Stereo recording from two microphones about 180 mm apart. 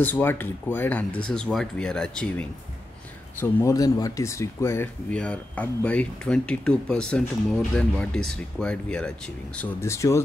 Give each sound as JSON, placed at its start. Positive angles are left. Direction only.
{"t": 0.0, "sound": "speech", "side_deg": 10}